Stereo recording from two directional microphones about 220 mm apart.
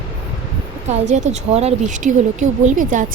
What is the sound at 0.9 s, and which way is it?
Speech, 30° right (ahead or behind).